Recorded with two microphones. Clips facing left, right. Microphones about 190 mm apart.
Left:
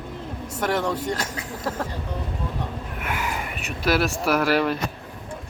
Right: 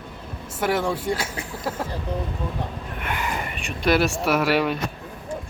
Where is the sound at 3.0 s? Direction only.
5° left (ahead or behind).